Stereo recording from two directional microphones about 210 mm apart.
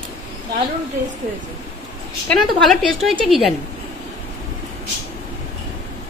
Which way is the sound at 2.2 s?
Centre (ahead or behind).